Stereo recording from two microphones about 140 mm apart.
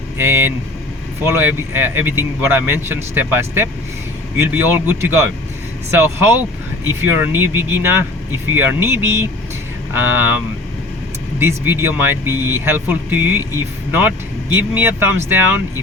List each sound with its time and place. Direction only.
0.2 s speech: 15° right (ahead or behind)
7.0 s speech: 15° right (ahead or behind)
11.3 s speech: 15° right (ahead or behind)